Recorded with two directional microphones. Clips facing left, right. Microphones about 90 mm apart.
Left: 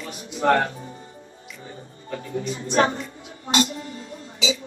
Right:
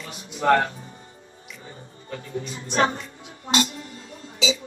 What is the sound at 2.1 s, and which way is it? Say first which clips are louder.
Speech: left 4 dB; 30° left (ahead or behind).